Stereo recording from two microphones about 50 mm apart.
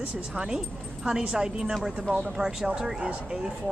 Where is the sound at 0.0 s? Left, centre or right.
Centre.